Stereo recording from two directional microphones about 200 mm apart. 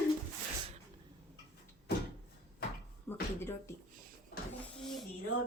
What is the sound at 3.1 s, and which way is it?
Music, 10° left (ahead or behind).